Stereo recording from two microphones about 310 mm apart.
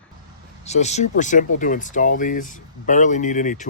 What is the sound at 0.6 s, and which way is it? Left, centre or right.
Speech, left.